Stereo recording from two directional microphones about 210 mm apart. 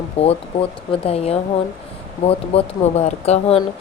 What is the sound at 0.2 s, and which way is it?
Speech, 30° left (ahead or behind).